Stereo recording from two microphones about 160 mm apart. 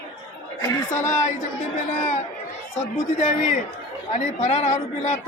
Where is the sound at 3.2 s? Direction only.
50° left (ahead or behind).